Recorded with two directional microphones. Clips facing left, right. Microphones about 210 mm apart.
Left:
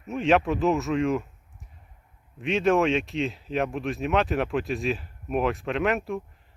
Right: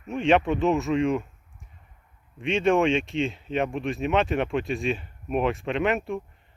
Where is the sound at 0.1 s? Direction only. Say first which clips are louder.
Right 1 dB; centre (ahead or behind).